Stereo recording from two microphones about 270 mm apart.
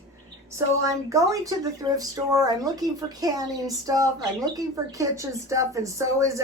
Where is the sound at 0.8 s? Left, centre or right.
Centre.